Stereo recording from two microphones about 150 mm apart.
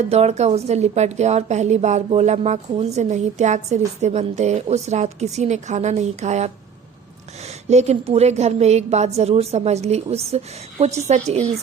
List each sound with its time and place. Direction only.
0.0 s a woman's voice: 45° right (ahead or behind)